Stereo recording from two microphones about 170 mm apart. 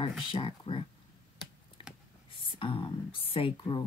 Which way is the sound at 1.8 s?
30° left (ahead or behind).